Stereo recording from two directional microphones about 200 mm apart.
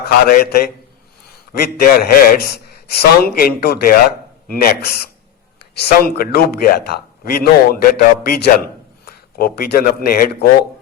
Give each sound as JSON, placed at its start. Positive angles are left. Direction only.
{"t": 0.0, "sound": "a man's voice", "side_deg": 50}